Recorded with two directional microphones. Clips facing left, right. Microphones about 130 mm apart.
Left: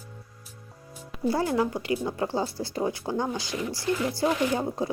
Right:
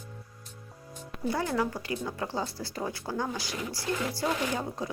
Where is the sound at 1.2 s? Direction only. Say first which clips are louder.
Left 4 dB; 30° left (ahead or behind).